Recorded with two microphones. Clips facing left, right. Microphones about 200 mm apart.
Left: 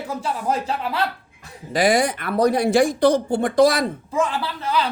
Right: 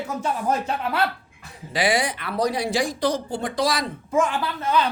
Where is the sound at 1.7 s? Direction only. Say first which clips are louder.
Left 4 dB; 45° left (ahead or behind).